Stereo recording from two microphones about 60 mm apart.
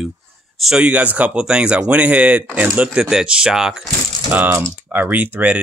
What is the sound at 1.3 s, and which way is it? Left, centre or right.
Speech, centre.